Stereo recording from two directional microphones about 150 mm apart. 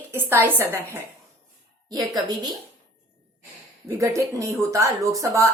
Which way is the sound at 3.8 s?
20° right (ahead or behind).